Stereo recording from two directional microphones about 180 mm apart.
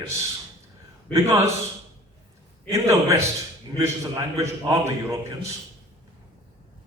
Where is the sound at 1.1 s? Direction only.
15° right (ahead or behind).